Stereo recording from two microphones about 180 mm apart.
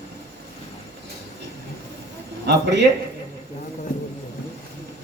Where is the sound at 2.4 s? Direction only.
75° right (ahead or behind).